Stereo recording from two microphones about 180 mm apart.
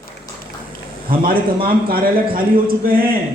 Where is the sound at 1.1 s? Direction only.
55° right (ahead or behind).